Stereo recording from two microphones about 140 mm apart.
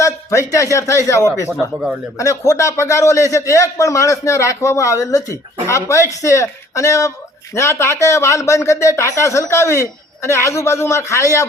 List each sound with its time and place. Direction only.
0.0 s a man's voice: 20° left (ahead or behind)